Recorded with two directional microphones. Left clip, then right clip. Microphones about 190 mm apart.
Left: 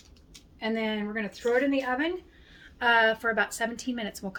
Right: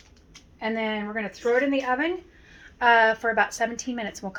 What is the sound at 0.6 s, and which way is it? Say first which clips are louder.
A woman's voice: right 3 dB; 25° left (ahead or behind).